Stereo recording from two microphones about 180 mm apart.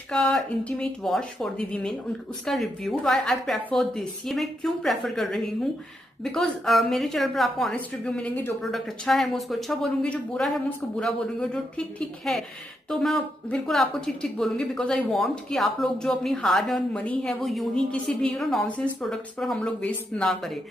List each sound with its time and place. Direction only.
0.1 s a woman's voice: 5° left (ahead or behind)